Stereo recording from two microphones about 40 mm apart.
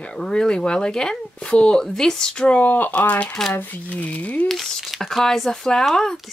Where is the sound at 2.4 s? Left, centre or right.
Left.